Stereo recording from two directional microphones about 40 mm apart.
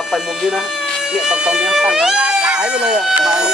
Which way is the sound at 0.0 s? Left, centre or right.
Centre.